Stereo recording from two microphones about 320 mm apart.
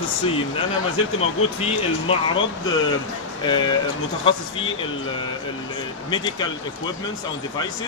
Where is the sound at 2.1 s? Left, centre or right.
Centre.